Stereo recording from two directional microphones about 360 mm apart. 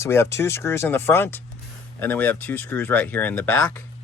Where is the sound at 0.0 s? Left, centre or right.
Centre.